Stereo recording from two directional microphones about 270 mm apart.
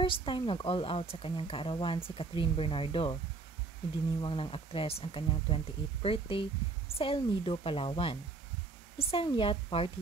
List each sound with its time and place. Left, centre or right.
0.0 s a woman's voice: centre
4.2 s a woman's voice: centre